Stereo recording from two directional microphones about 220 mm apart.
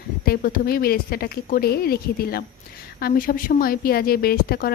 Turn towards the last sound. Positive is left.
turn(degrees=45)  # may be behind; listen again after turning